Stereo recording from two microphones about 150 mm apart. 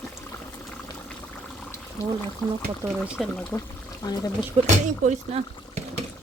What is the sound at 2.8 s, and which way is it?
Speech, 25° right (ahead or behind).